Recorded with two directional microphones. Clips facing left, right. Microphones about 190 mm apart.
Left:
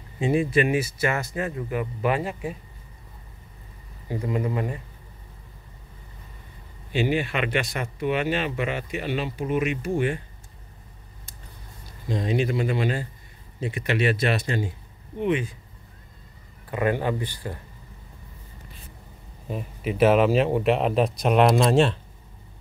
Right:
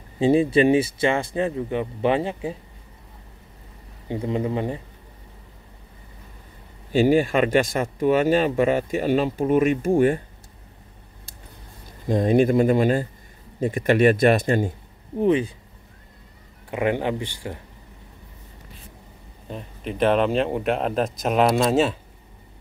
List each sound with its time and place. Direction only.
0.2 s speech: 30° right (ahead or behind)
4.1 s speech: 25° right (ahead or behind)
6.9 s speech: 45° right (ahead or behind)
12.1 s speech: 50° right (ahead or behind)
15.1 s speech: 35° right (ahead or behind)
16.7 s speech: 20° right (ahead or behind)
19.4 s speech: 5° left (ahead or behind)